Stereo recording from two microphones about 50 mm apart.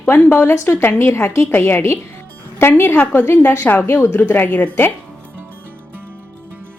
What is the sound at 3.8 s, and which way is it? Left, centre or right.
Speech, left.